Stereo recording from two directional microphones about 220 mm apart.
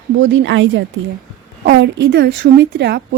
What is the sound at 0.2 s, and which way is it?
A woman's voice, 60° right (ahead or behind).